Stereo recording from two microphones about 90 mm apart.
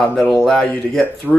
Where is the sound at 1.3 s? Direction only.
5° right (ahead or behind).